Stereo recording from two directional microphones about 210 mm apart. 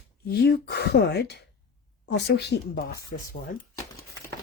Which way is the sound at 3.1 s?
40° left (ahead or behind).